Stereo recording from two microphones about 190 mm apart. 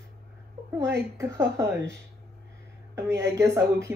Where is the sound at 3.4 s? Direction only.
15° right (ahead or behind).